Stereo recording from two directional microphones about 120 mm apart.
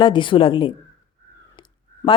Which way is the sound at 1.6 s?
40° left (ahead or behind).